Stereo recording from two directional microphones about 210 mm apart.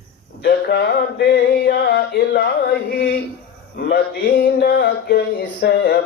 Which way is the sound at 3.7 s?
50° left (ahead or behind).